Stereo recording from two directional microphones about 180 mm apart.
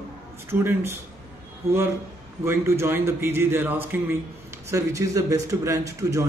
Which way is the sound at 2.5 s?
15° right (ahead or behind).